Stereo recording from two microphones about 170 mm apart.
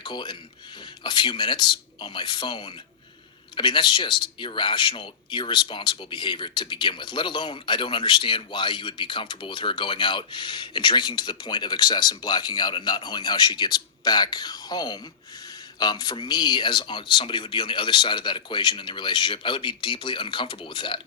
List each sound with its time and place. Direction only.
0.0 s speech: 25° left (ahead or behind)